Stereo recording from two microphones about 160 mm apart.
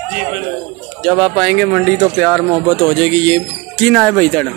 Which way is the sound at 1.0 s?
5° right (ahead or behind).